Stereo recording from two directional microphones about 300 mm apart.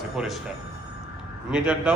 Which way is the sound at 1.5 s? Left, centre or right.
Centre.